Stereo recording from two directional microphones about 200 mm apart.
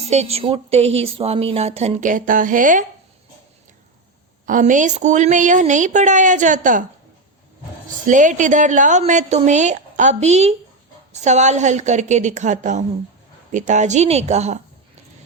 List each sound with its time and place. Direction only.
0.0 s speech: 30° right (ahead or behind)
4.4 s speech: 40° right (ahead or behind)
7.9 s speech: 40° right (ahead or behind)